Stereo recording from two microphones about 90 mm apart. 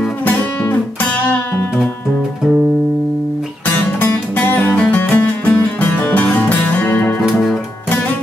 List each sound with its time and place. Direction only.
4.0 s music: 20° left (ahead or behind)